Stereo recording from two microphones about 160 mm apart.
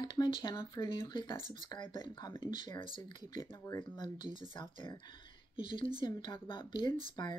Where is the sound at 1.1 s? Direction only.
30° left (ahead or behind).